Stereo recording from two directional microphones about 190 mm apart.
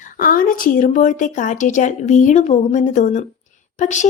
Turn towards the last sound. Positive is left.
turn(degrees=40)  # may be behind; listen again after turning